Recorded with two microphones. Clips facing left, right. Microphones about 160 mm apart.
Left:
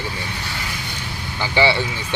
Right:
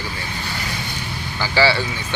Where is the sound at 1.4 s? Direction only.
20° left (ahead or behind).